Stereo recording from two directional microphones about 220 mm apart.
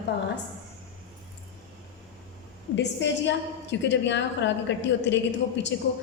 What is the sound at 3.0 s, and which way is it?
A woman's voice, 55° left (ahead or behind).